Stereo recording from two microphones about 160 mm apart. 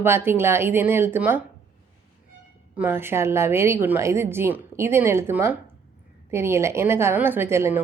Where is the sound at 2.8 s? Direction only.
15° right (ahead or behind).